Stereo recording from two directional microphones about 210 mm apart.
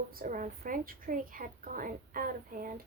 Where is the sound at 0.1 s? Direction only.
40° right (ahead or behind).